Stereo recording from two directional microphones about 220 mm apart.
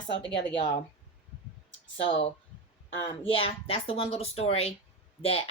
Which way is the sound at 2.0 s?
25° left (ahead or behind).